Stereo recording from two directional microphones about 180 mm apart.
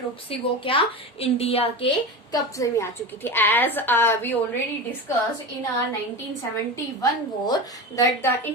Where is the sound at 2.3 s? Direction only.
20° left (ahead or behind).